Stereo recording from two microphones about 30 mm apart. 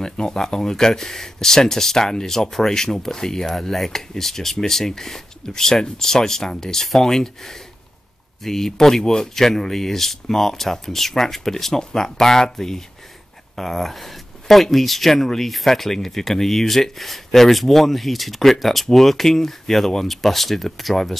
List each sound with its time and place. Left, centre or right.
0.0 s speech: left; by 21.2 s centre